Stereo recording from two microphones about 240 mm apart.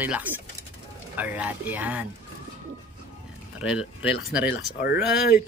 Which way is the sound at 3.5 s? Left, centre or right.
Centre.